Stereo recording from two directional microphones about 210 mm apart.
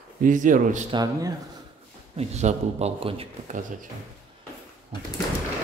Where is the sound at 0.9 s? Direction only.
15° right (ahead or behind).